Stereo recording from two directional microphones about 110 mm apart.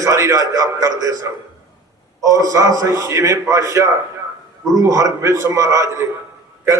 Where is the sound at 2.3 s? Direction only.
30° right (ahead or behind).